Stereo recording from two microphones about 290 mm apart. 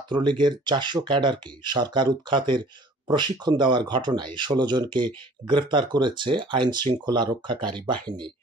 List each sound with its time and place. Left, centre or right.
0.1 s speech: centre